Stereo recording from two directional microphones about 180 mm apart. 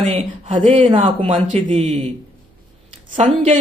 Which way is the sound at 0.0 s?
35° right (ahead or behind).